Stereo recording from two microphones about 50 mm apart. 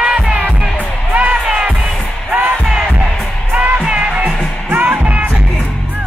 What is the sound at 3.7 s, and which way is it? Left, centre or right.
Music, centre.